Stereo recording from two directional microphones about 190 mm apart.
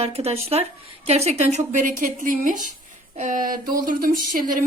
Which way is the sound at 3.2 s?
45° right (ahead or behind).